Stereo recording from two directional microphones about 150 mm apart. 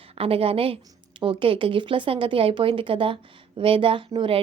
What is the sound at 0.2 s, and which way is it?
A woman's voice, 40° right (ahead or behind).